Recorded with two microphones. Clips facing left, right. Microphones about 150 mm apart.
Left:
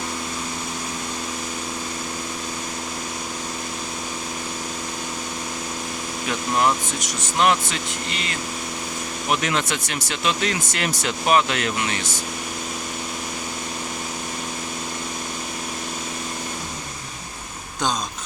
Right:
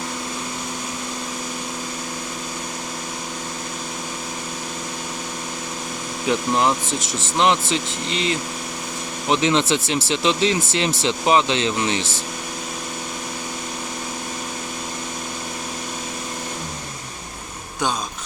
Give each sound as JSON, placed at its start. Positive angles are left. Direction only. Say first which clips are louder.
{"t": 6.6, "sound": "speech", "louder": "right 1 dB", "side_deg": -25}